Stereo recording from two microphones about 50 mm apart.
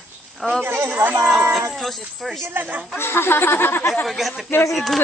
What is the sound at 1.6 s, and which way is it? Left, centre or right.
Speech, centre.